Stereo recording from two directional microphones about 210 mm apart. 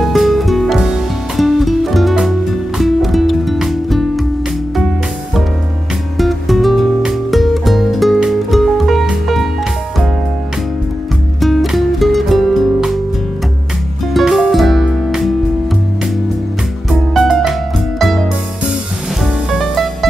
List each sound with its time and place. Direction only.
0.0 s music: centre (ahead or behind)
6.1 s music: centre (ahead or behind)
11.4 s music: centre (ahead or behind)
14.1 s music: centre (ahead or behind)
16.9 s music: centre (ahead or behind)
19.5 s music: centre (ahead or behind)